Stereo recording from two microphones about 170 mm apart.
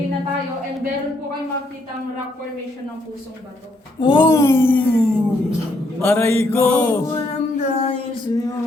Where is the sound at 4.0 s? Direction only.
30° left (ahead or behind).